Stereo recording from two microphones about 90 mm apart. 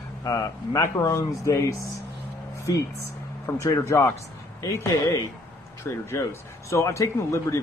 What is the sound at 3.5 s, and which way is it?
Speech, 30° left (ahead or behind).